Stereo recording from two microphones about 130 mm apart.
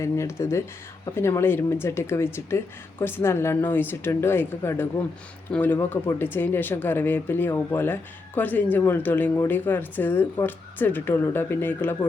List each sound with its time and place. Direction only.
0.0 s speech: 20° left (ahead or behind)